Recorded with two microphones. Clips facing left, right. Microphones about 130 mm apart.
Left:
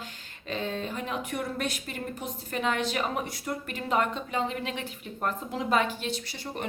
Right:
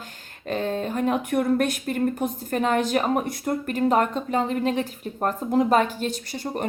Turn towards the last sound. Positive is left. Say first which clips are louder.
# right 6 dB
turn(degrees=-45)  # may be behind; listen again after turning